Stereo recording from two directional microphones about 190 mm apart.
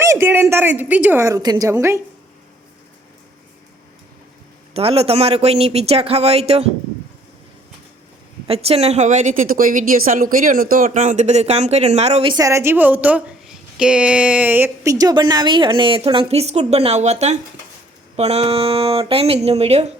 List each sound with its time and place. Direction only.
0.0 s a woman's voice: 15° right (ahead or behind)
4.7 s a woman's voice: 30° right (ahead or behind)
8.4 s a woman's voice: 30° right (ahead or behind)